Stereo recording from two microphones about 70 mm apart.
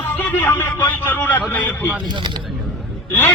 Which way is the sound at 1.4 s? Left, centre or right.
Left.